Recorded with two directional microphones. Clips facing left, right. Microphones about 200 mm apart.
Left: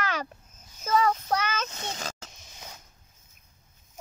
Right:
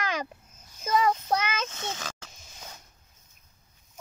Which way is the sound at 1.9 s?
40° left (ahead or behind).